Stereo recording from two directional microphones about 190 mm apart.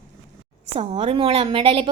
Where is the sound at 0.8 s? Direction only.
30° right (ahead or behind).